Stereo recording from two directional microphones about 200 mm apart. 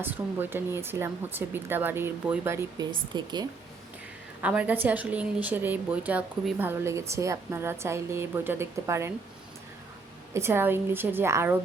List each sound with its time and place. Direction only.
0.0 s a woman's voice: 10° right (ahead or behind)
4.4 s a woman's voice: 5° right (ahead or behind)
10.3 s a woman's voice: 10° right (ahead or behind)